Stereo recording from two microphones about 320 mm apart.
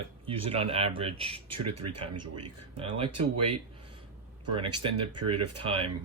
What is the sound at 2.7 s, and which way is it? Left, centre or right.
Speech, centre.